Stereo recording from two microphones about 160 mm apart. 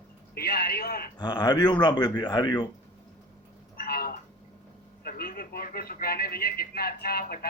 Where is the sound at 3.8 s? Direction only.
70° left (ahead or behind).